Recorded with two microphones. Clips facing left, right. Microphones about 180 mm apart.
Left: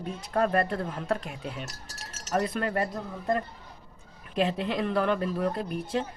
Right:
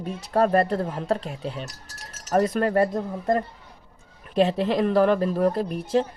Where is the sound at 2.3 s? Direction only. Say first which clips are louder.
Right 7 dB; 45° right (ahead or behind).